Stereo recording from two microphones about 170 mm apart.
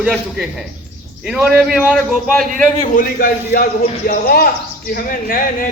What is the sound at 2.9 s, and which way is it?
A man's voice, 60° left (ahead or behind).